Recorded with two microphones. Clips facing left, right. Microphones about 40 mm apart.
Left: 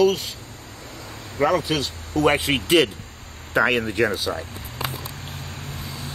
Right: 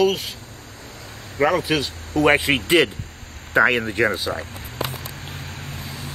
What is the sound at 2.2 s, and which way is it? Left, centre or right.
Speech, right.